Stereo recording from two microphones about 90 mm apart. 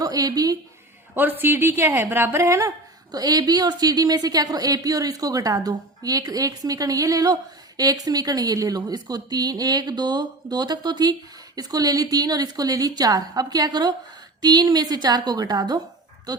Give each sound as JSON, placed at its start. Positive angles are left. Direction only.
{"t": 0.0, "sound": "a woman's voice", "side_deg": -45}
{"t": 1.1, "sound": "a woman's voice", "side_deg": -20}
{"t": 3.1, "sound": "a woman's voice", "side_deg": -50}